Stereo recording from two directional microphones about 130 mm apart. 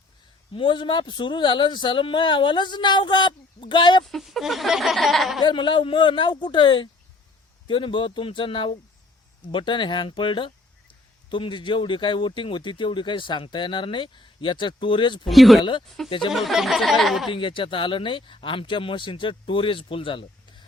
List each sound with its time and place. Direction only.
0.5 s speech: 40° left (ahead or behind)
4.0 s speech: centre (ahead or behind)
5.4 s speech: 35° left (ahead or behind)
15.3 s speech: centre (ahead or behind)
16.0 s speech: 40° left (ahead or behind)
16.3 s speech: centre (ahead or behind)
17.2 s speech: 40° left (ahead or behind)